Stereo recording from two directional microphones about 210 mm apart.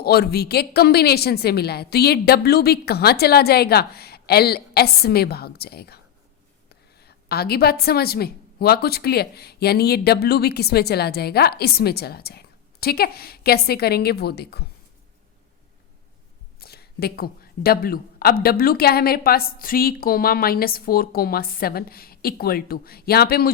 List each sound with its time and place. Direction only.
0.0 s a woman's voice: 50° left (ahead or behind)
7.0 s a woman's voice: 50° left (ahead or behind)
16.6 s a woman's voice: 50° left (ahead or behind)